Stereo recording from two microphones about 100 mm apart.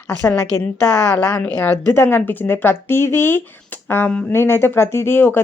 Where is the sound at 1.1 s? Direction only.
10° left (ahead or behind).